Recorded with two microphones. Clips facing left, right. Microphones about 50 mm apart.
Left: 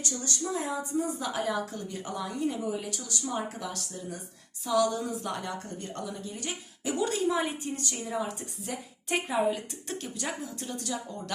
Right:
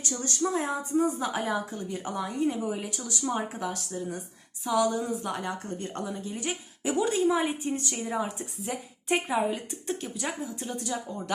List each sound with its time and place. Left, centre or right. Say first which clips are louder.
0.0 s a woman's voice: right 4 dB; right
1.5 s a woman's voice: right 1 dB; centre
4.6 s speech: right 1 dB; centre
5.5 s a woman's voice: right 3 dB; right